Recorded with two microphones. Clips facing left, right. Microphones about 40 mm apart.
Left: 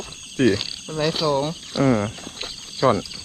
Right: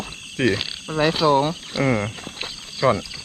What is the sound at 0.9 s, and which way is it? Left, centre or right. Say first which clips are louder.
Speech: right 4 dB; centre.